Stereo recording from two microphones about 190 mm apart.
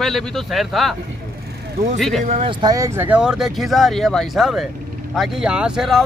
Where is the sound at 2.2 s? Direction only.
40° right (ahead or behind).